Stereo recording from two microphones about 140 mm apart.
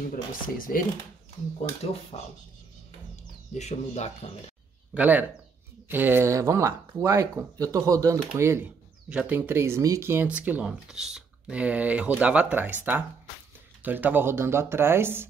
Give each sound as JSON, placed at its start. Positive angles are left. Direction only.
{"t": 0.1, "sound": "speech", "side_deg": 80}
{"t": 2.1, "sound": "speech", "side_deg": 40}
{"t": 3.5, "sound": "speech", "side_deg": 50}
{"t": 4.9, "sound": "speech", "side_deg": -10}